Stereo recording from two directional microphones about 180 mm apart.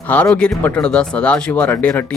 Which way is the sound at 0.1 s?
5° left (ahead or behind).